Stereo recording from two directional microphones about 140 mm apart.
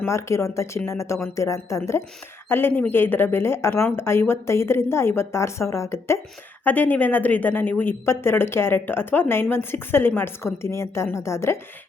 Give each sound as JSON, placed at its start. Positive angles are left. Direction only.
{"t": 0.0, "sound": "a woman's voice", "side_deg": 20}